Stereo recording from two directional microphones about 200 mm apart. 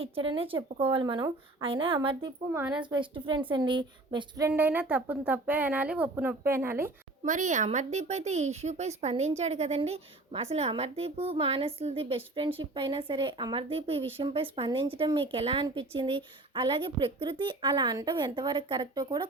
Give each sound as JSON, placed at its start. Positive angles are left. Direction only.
{"t": 0.0, "sound": "speech", "side_deg": -25}
{"t": 2.6, "sound": "a woman's voice", "side_deg": -5}
{"t": 2.9, "sound": "a woman's voice", "side_deg": -25}
{"t": 7.3, "sound": "a woman's voice", "side_deg": -35}